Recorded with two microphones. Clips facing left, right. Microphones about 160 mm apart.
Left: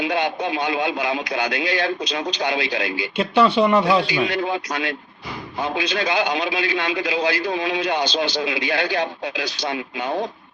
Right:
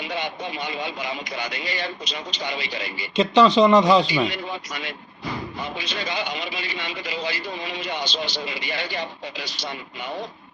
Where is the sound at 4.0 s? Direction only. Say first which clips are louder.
Left 2 dB; 70° left (ahead or behind).